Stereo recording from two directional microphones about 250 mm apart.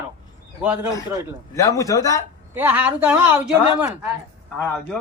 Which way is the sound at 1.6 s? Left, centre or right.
Centre.